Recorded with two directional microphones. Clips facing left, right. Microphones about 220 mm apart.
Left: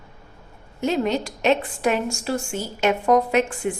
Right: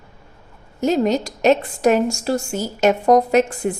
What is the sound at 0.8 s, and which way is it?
A woman's voice, 40° right (ahead or behind).